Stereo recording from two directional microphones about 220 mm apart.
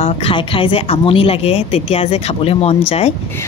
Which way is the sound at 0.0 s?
25° left (ahead or behind).